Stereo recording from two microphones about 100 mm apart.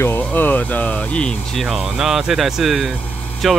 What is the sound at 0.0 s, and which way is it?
Speech, 20° left (ahead or behind).